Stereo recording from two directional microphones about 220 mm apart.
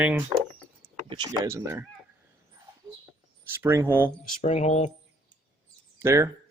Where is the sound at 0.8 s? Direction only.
20° right (ahead or behind).